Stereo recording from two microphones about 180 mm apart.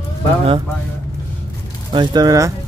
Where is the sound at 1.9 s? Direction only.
20° right (ahead or behind).